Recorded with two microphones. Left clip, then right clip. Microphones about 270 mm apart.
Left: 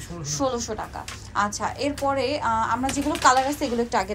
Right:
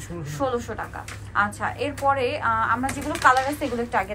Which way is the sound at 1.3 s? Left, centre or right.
Centre.